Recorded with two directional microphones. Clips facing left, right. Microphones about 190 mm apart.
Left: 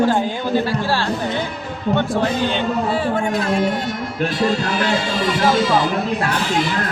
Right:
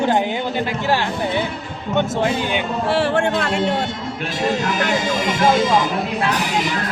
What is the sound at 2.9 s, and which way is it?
Speech, 75° right (ahead or behind).